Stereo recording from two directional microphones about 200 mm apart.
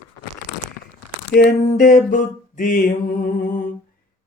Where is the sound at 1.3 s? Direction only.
50° left (ahead or behind).